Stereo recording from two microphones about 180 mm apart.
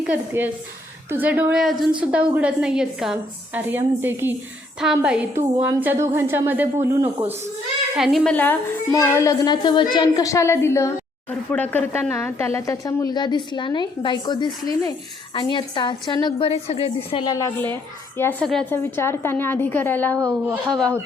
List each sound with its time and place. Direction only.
0.1 s a woman's voice: 10° right (ahead or behind)
7.9 s a woman's voice: centre (ahead or behind); by 17.3 s 30° left (ahead or behind)
17.3 s a woman's voice: 15° left (ahead or behind)
18.7 s a woman's voice: 10° left (ahead or behind)
20.1 s a woman's voice: 15° right (ahead or behind)